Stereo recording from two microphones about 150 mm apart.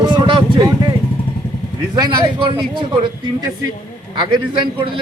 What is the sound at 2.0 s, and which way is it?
Speech, 30° right (ahead or behind).